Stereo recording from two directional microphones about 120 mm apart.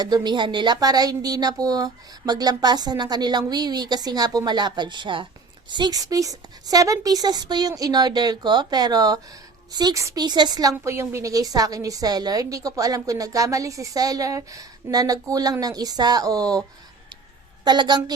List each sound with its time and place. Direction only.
0.0 s a woman's voice: 35° right (ahead or behind)